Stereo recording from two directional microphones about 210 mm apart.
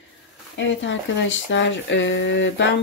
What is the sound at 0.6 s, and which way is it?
Speech, 60° left (ahead or behind).